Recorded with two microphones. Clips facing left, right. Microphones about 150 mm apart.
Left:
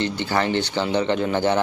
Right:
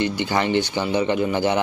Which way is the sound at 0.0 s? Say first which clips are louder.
Right 1 dB; 15° right (ahead or behind).